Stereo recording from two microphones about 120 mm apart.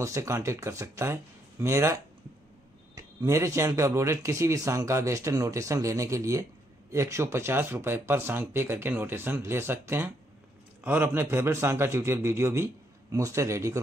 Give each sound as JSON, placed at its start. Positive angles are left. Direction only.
{"t": 0.0, "sound": "speech", "side_deg": -25}
{"t": 3.0, "sound": "speech", "side_deg": -25}